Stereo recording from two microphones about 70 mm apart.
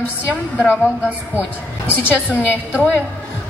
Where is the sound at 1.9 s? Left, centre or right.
Left.